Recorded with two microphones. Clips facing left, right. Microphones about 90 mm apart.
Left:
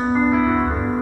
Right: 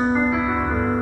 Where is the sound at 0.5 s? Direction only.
25° left (ahead or behind).